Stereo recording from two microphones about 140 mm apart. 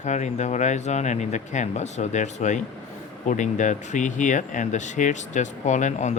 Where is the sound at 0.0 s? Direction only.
55° left (ahead or behind).